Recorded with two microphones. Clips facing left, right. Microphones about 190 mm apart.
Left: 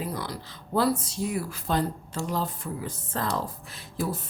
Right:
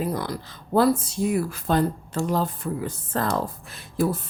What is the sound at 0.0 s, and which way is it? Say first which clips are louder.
Speech: right 6 dB; 50° right (ahead or behind).